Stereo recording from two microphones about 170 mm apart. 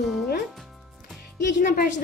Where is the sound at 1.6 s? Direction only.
55° left (ahead or behind).